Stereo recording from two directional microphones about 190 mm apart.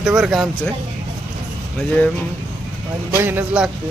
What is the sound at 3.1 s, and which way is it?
Speech, 10° right (ahead or behind).